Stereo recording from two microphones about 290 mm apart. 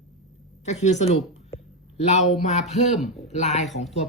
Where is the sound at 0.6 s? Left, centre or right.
Left.